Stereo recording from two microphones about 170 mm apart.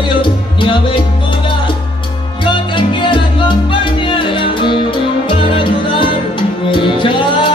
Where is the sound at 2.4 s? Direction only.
30° left (ahead or behind).